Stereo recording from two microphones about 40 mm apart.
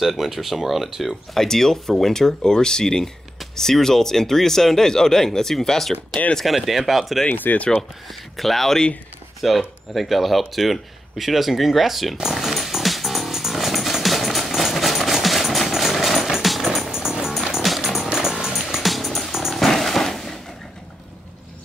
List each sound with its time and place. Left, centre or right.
0.0 s speech: centre
1.3 s speech: centre
6.4 s speech: centre
7.2 s speech: left
8.1 s speech: centre
10.5 s a sound: centre
16.9 s music: centre
19.6 s roaring cats: centre